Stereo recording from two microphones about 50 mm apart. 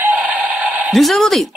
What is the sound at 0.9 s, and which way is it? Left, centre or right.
Speech, centre.